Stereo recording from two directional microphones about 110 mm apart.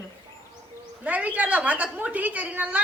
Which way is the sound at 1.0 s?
15° right (ahead or behind).